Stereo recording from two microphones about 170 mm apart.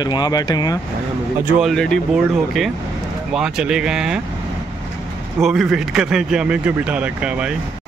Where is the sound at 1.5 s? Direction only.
Centre (ahead or behind).